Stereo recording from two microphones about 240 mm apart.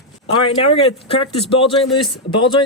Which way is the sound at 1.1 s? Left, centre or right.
Left.